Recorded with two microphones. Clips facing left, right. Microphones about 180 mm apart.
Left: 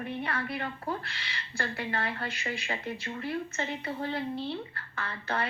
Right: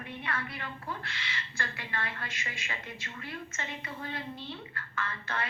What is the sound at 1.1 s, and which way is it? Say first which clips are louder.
A woman's voice: right 1 dB; 35° left (ahead or behind).